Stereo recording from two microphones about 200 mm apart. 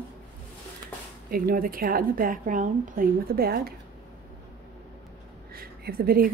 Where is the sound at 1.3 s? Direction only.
45° right (ahead or behind).